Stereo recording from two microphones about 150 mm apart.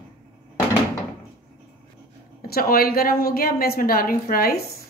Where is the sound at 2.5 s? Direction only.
80° left.